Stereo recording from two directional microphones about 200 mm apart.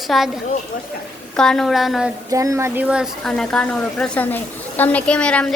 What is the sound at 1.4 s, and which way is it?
Speech, centre (ahead or behind).